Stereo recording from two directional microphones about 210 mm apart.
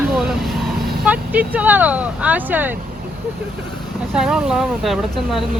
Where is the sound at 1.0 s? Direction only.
10° right (ahead or behind).